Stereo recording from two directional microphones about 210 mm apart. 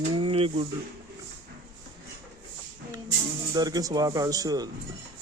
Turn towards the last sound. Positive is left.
turn(degrees=-15)  # may be behind; listen again after turning